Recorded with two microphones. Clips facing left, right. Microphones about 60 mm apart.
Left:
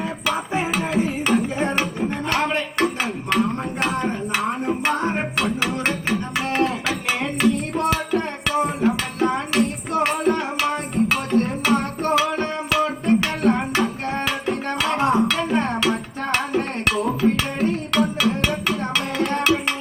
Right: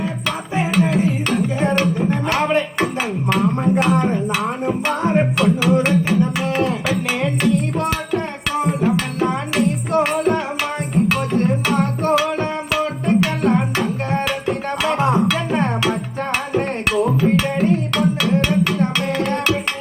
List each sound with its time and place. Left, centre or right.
0.3 s music: centre